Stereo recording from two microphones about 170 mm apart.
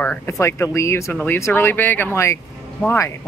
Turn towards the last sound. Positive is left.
turn(degrees=15)  # may be behind; listen again after turning